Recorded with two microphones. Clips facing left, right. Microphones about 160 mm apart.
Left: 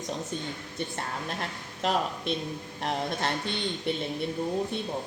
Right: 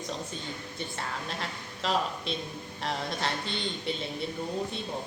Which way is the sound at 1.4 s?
55° left (ahead or behind).